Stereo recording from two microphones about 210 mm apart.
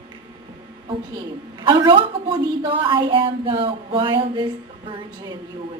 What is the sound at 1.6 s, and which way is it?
A woman's voice, 20° right (ahead or behind).